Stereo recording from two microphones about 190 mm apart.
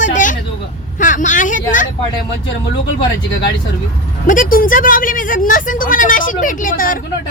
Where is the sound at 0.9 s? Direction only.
45° left (ahead or behind).